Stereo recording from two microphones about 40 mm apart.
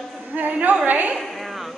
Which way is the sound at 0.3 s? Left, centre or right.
Right.